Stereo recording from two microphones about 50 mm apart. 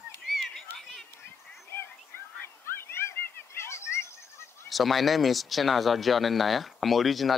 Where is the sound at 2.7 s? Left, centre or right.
Left.